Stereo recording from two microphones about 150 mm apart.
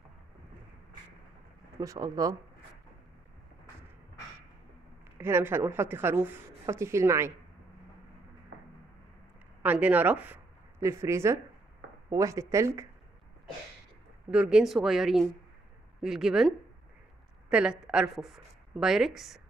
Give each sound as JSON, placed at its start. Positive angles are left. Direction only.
{"t": 1.8, "sound": "a woman's voice", "side_deg": -25}
{"t": 5.2, "sound": "a woman's voice", "side_deg": -15}
{"t": 9.6, "sound": "a woman's voice", "side_deg": -10}
{"t": 14.3, "sound": "a woman's voice", "side_deg": -5}